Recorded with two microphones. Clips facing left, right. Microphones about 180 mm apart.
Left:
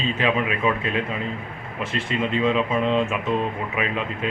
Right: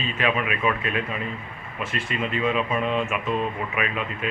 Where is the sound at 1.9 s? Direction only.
25° left (ahead or behind).